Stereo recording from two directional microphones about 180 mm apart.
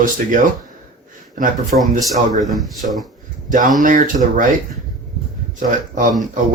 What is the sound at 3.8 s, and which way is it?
Speech, 45° right (ahead or behind).